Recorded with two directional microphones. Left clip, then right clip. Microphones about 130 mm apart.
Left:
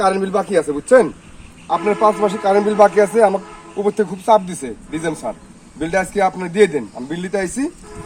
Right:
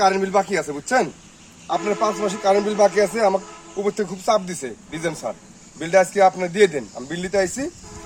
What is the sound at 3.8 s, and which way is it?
A man's voice, 25° right (ahead or behind).